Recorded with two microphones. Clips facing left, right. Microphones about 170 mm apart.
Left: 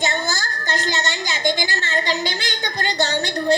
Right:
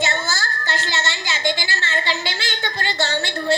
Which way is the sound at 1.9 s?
40° left (ahead or behind).